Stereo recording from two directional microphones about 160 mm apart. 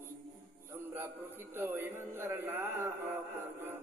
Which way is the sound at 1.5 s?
15° right (ahead or behind).